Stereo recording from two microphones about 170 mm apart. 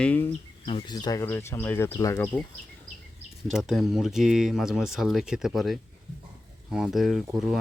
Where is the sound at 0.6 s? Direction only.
25° left (ahead or behind).